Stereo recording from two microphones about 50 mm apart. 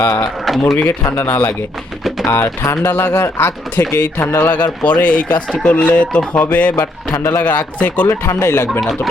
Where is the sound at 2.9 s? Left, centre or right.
Left.